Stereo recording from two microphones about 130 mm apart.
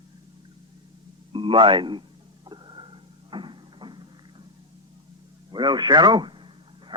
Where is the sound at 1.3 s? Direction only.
40° right (ahead or behind).